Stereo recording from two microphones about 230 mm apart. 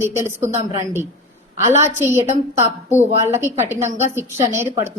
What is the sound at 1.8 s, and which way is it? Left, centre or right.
Speech, centre.